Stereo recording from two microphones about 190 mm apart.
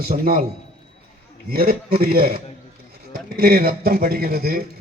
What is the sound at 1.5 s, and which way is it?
A man's voice, 55° right (ahead or behind).